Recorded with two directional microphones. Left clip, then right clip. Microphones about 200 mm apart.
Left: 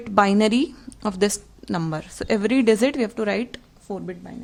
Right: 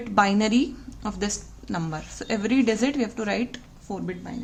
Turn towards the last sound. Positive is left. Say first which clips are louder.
# left 1 dB
turn(degrees=35)  # may be behind; listen again after turning